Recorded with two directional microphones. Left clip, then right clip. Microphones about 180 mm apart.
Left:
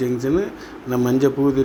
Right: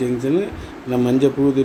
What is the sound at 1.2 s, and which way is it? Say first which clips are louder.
Speech: right 1 dB; 25° left (ahead or behind).